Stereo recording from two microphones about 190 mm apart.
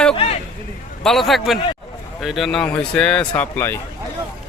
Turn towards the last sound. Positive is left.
turn(degrees=10)  # may be behind; listen again after turning